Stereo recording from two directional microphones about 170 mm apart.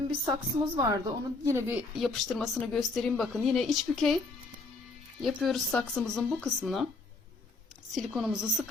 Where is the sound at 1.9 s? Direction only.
Centre (ahead or behind).